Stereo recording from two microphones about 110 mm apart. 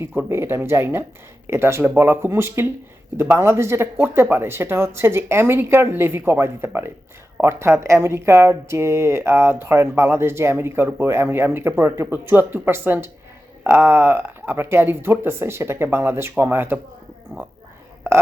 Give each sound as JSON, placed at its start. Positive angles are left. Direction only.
{"t": 0.0, "sound": "speech", "side_deg": -20}